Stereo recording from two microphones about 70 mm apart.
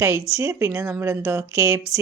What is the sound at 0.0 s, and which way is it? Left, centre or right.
Speech, right.